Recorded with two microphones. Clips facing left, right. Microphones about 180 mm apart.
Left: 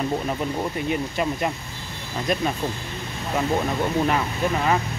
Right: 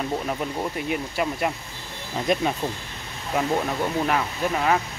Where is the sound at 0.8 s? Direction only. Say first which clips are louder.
Left 2 dB; 5° right (ahead or behind).